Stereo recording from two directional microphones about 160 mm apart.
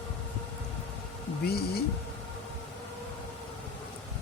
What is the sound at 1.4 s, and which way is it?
Speech, 80° left.